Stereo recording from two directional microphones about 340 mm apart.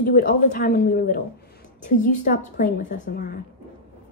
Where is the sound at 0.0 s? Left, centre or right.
Left.